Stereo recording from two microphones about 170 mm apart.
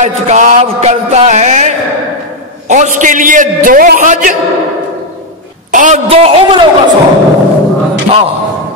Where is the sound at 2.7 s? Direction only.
45° right (ahead or behind).